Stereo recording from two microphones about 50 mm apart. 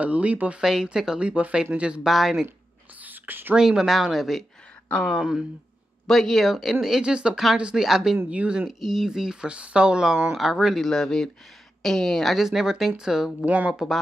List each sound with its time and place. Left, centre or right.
0.0 s speech: right
0.6 s speech: centre
1.3 s speech: right
2.0 s speech: centre
3.0 s whispering: right
3.5 s speech: centre
6.0 s speech: centre
7.8 s speech: centre
8.3 s speech: right
8.6 s speech: centre
10.8 s a woman's voice: centre
12.4 s speech: centre